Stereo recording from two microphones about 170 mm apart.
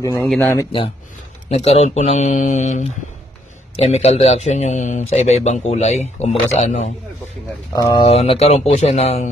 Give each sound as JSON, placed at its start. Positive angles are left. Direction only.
{"t": 0.0, "sound": "speech", "side_deg": 20}
{"t": 0.3, "sound": "speech", "side_deg": 5}
{"t": 1.5, "sound": "speech", "side_deg": 40}
{"t": 7.7, "sound": "speech", "side_deg": 20}
{"t": 8.0, "sound": "speech", "side_deg": 35}